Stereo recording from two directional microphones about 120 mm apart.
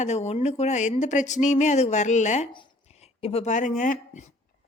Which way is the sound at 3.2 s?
60° left (ahead or behind).